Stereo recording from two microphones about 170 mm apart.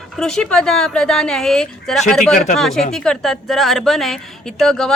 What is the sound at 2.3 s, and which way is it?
Speech, 45° left (ahead or behind).